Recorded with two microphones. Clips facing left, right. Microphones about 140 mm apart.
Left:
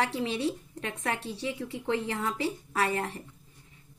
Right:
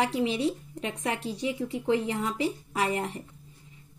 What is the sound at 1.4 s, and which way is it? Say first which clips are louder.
A woman's voice: right 4 dB; 15° right (ahead or behind).